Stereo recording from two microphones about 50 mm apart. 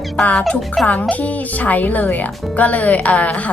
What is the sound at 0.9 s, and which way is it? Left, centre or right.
A woman's voice, left.